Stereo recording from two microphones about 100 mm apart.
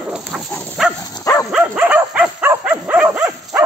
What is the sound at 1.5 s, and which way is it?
Dog, 15° right (ahead or behind).